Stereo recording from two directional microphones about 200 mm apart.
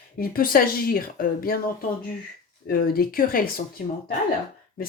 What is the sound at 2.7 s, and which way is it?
Speech, 45° left (ahead or behind).